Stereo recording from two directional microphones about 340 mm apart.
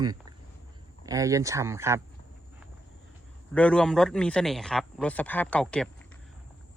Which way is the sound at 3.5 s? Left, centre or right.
Centre.